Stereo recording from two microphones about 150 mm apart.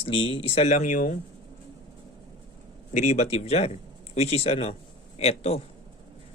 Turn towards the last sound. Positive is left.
turn(degrees=45)  # may be behind; listen again after turning